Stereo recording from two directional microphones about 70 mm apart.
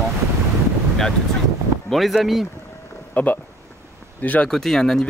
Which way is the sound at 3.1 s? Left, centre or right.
Left.